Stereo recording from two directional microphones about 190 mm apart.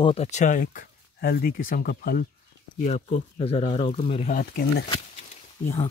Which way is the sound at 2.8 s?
35° left (ahead or behind).